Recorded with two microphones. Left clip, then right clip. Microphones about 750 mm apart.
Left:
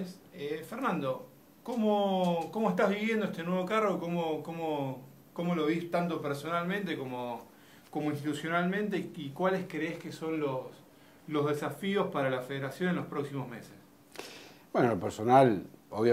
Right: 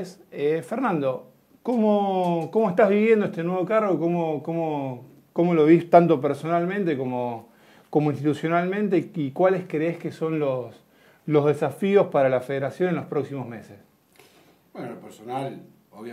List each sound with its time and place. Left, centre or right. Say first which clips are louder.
0.4 s speech: right 12 dB; right
5.9 s speech: right 15 dB; right
7.9 s speech: right 11 dB; right
11.2 s speech: right 11 dB; right
14.7 s a man's voice: left 9 dB; left